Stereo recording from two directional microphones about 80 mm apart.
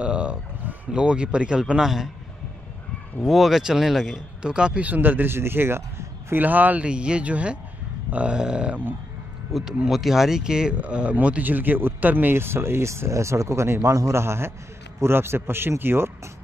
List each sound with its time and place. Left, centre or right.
0.0 s speech: centre
3.2 s speech: centre; by 6.4 s right
6.4 s a man's voice: right